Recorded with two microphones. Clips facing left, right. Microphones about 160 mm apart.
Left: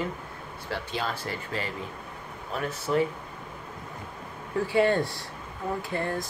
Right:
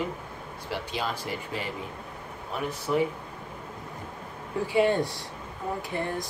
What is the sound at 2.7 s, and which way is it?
Speech, 15° right (ahead or behind).